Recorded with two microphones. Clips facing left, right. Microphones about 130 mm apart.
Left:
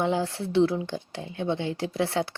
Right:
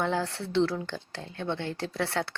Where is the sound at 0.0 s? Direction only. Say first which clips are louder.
Left 3 dB; 15° left (ahead or behind).